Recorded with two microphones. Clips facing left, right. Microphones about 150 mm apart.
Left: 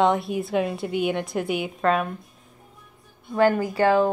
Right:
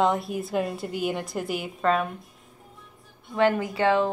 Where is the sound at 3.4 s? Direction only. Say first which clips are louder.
Left 3 dB; 35° left (ahead or behind).